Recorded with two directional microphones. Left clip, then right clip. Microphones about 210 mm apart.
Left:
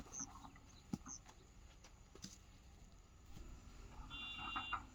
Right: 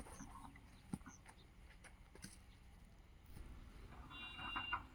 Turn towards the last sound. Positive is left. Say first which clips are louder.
# even
turn(degrees=15)  # may be behind; listen again after turning